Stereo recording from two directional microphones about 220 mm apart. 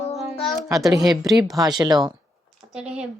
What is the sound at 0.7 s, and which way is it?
Speech, centre (ahead or behind).